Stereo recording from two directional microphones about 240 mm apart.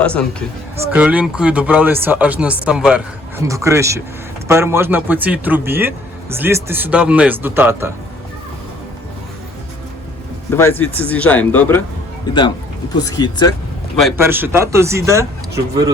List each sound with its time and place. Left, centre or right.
0.0 s a man's voice: centre
10.5 s speech: centre
14.2 s speech: centre